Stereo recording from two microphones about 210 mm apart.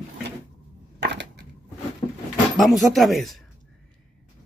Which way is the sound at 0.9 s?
55° right (ahead or behind).